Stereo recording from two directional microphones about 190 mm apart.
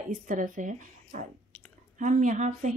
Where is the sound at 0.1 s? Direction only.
45° right (ahead or behind).